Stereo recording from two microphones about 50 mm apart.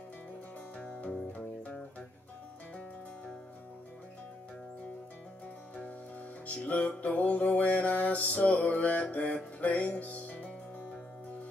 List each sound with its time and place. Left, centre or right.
0.7 s music: centre
1.0 s music: left
6.4 s music: left